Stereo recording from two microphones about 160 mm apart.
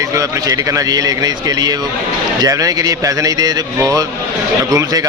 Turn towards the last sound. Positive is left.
turn(degrees=-20)  # may be behind; listen again after turning